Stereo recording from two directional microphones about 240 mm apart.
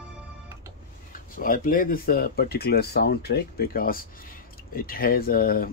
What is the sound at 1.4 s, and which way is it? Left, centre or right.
Speech, left.